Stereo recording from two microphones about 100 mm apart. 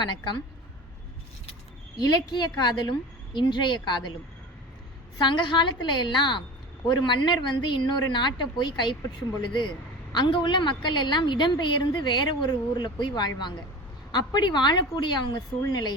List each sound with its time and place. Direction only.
0.0 s a woman's voice: 50° left (ahead or behind)
2.0 s a woman's voice: 40° left (ahead or behind)
5.1 s a woman's voice: 50° left (ahead or behind)
10.1 s a woman's voice: 50° left (ahead or behind)